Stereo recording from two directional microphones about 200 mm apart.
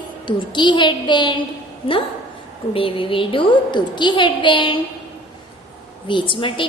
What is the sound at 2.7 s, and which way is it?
A woman's voice, 25° left (ahead or behind).